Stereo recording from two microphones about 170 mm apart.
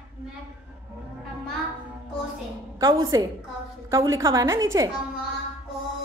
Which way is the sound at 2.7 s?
20° right (ahead or behind).